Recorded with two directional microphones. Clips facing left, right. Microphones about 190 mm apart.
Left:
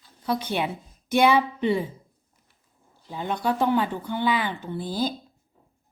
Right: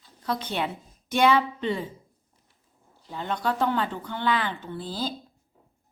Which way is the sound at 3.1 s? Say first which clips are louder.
Left 2 dB; 10° left (ahead or behind).